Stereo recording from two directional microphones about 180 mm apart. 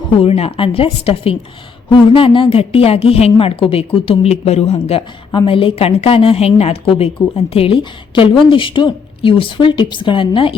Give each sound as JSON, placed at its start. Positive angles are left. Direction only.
{"t": 0.2, "sound": "a woman's voice", "side_deg": 35}